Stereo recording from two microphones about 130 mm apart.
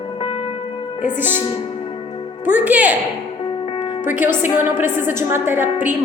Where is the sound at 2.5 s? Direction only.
10° right (ahead or behind).